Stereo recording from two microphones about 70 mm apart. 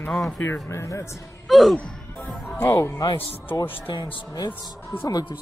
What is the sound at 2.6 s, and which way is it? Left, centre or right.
Speech, left.